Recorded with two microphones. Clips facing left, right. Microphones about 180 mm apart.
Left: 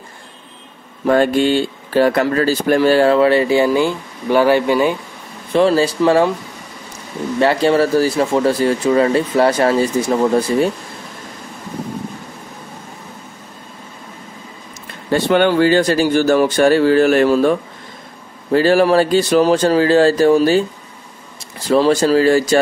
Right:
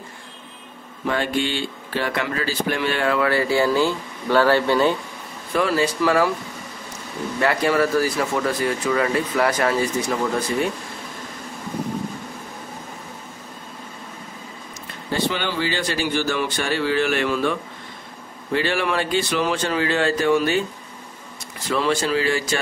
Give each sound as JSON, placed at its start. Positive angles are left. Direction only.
{"t": 1.0, "sound": "speech", "side_deg": 45}
{"t": 5.5, "sound": "speech", "side_deg": 30}
{"t": 7.3, "sound": "speech", "side_deg": 30}
{"t": 15.0, "sound": "speech", "side_deg": 60}
{"t": 21.6, "sound": "speech", "side_deg": 35}